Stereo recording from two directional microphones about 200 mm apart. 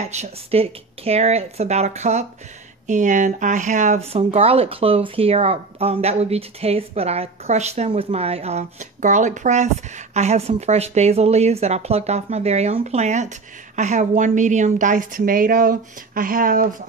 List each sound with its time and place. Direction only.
0.0 s a woman's voice: 35° right (ahead or behind)